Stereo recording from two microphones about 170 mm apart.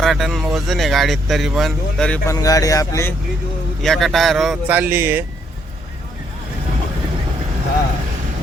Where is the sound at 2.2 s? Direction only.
20° left (ahead or behind).